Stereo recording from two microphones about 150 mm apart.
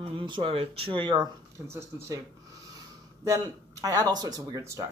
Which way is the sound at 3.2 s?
20° right (ahead or behind).